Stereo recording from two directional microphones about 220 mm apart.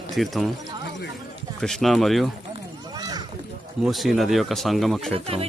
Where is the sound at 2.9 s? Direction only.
20° right (ahead or behind).